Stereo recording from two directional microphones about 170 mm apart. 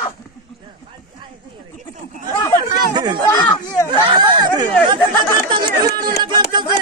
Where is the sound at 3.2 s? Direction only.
15° left (ahead or behind).